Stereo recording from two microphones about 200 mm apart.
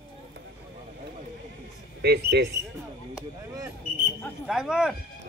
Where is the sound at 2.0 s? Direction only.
55° right (ahead or behind).